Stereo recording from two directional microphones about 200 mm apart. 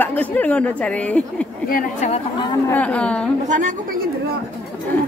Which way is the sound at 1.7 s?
40° left (ahead or behind).